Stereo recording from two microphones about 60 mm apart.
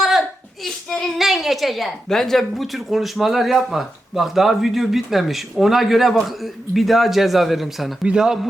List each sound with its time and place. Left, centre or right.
0.0 s a sound: centre
0.9 s child singing: centre
1.2 s speech: centre
8.0 s a man's voice: centre